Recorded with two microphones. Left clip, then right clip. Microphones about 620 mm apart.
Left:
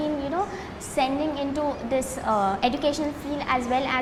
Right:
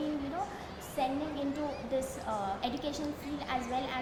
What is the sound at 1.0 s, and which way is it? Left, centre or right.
A woman's voice, left.